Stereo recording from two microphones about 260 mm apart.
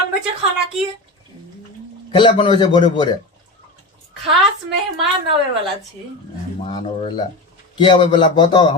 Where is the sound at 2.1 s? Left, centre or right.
Centre.